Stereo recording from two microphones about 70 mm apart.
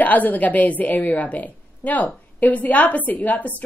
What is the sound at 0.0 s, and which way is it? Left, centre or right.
A woman's voice, left.